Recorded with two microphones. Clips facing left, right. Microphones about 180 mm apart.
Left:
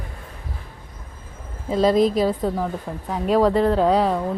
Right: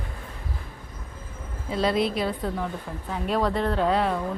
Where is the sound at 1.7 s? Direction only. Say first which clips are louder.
Left 7 dB; 40° left (ahead or behind).